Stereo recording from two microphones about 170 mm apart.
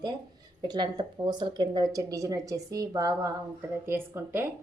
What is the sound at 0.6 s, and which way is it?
A woman's voice, 25° right (ahead or behind).